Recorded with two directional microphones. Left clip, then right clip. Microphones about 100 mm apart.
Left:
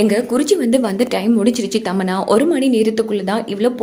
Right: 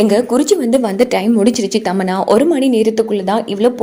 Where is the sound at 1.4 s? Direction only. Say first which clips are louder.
Right 3 dB; 45° right (ahead or behind).